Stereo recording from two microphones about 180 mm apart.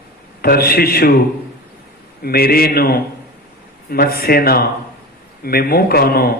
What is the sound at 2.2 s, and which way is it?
A man's voice, 60° left (ahead or behind).